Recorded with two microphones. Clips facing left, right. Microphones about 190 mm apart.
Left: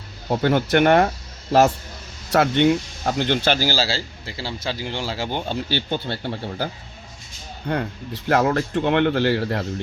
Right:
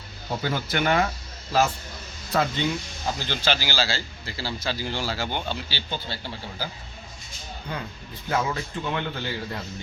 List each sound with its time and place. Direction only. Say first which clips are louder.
0.3 s speech: left 9 dB; 60° left (ahead or behind)
2.3 s speech: left 7 dB; 75° left (ahead or behind)
3.1 s a man's voice: left 7 dB; 60° left (ahead or behind); by 5.4 s 30° left (ahead or behind)
5.5 s speech: left 7 dB; 55° left (ahead or behind)
7.7 s speech: left 10 dB; 65° left (ahead or behind)